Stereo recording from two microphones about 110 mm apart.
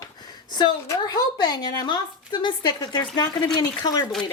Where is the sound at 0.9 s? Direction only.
35° left (ahead or behind).